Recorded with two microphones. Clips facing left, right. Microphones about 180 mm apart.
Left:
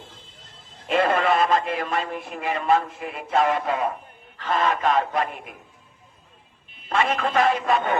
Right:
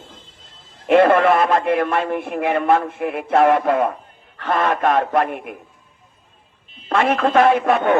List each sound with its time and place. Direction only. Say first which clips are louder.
0.9 s a man's voice: right 8 dB; 60° right (ahead or behind)
6.8 s a man's voice: right 6 dB; 60° right (ahead or behind)